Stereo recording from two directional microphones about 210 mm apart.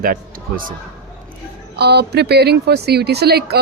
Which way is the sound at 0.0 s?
45° right (ahead or behind).